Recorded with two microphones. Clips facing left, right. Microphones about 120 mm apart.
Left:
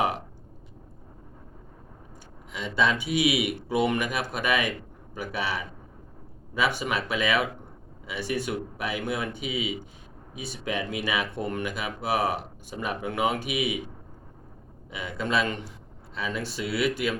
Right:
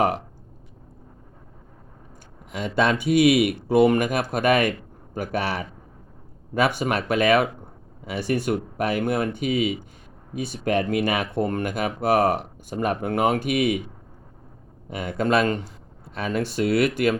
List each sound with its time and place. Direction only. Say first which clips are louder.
2.5 s speech: right 4 dB; 50° right (ahead or behind)
14.8 s speech: right 7 dB; 50° right (ahead or behind)